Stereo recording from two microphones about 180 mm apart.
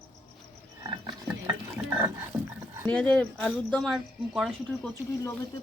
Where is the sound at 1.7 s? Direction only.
10° right (ahead or behind).